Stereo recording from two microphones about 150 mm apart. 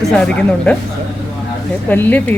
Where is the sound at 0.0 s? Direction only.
5° left (ahead or behind).